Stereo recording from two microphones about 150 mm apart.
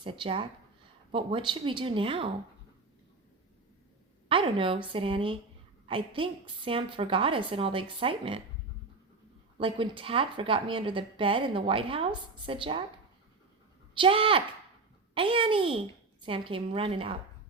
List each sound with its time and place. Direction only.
0.0 s a woman's voice: 35° right (ahead or behind)
4.3 s a woman's voice: 35° right (ahead or behind)
9.6 s a woman's voice: 35° right (ahead or behind)
13.9 s a woman's voice: 35° right (ahead or behind)